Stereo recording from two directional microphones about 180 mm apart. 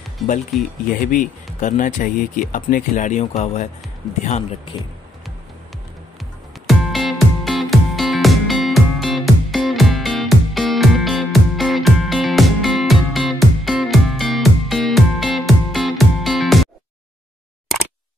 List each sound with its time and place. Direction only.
0.5 s speech: centre (ahead or behind)
0.9 s speech: 50° left (ahead or behind)
6.7 s music: centre (ahead or behind)